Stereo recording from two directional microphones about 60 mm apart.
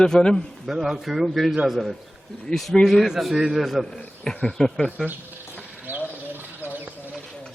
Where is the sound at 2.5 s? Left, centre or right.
Centre.